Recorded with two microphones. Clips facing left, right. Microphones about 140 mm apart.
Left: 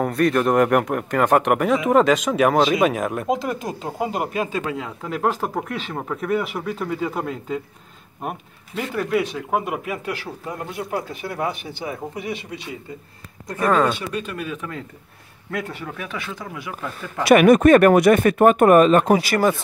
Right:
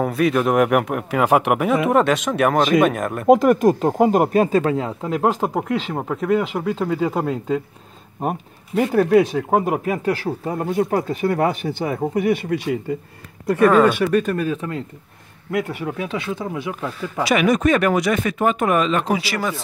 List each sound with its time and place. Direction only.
0.0 s speech: 5° right (ahead or behind)
3.3 s speech: 50° right (ahead or behind); by 6.7 s 20° right (ahead or behind)
8.2 s speech: 40° right (ahead or behind); by 12.7 s 55° right (ahead or behind)
13.6 s speech: 5° right (ahead or behind)
13.9 s speech: 55° right (ahead or behind); by 16.9 s 20° right (ahead or behind)
17.2 s speech: 55° left (ahead or behind)